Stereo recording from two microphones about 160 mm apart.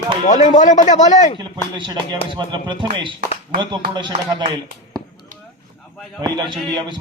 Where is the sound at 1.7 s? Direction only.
30° right (ahead or behind).